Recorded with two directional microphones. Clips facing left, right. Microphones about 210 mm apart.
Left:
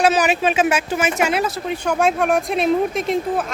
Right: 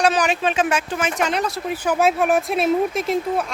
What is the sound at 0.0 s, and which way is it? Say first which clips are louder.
Speech: left 2 dB; 5° left (ahead or behind).